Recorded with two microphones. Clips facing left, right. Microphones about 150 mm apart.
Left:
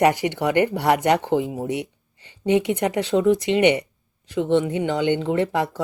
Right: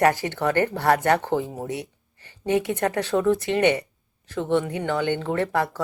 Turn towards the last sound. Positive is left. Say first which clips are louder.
# left 2 dB
turn(degrees=20)  # may be behind; listen again after turning